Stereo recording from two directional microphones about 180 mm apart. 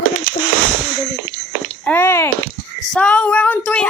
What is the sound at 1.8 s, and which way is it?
Child singing, 10° left (ahead or behind).